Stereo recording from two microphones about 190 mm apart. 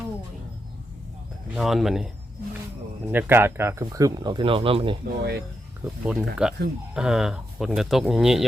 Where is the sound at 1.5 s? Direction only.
Centre (ahead or behind); by 4.9 s 30° right (ahead or behind).